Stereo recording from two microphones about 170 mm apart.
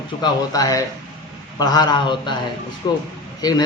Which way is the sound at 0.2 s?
25° left (ahead or behind).